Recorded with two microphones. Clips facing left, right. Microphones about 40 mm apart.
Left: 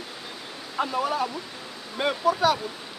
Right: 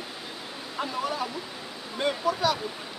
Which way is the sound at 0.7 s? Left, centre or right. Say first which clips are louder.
Left 5 dB; centre.